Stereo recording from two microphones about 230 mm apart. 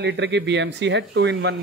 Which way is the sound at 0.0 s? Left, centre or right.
Right.